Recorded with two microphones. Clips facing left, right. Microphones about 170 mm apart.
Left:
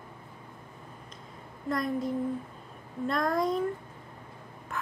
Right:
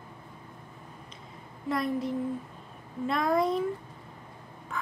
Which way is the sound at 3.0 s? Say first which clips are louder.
Right 2 dB; 5° right (ahead or behind).